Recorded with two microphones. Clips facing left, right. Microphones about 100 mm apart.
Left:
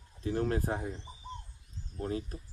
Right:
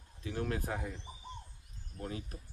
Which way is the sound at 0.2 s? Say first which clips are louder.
Left 6 dB; 35° left (ahead or behind).